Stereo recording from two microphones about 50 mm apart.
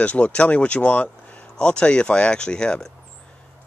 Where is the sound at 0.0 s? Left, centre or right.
Left.